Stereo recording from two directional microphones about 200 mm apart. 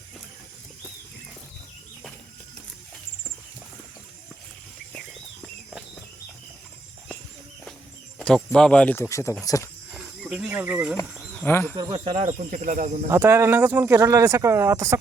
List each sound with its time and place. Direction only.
8.2 s cricket: 5° left (ahead or behind)
8.5 s speech: 5° left (ahead or behind)
9.9 s speech: 5° right (ahead or behind)
11.4 s speech: 10° left (ahead or behind)
11.7 s speech: 20° right (ahead or behind); by 13.1 s 40° right (ahead or behind)
13.1 s speech: 10° right (ahead or behind)